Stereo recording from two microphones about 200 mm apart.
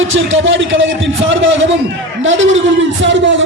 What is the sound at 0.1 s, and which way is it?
A man's voice, 75° right (ahead or behind).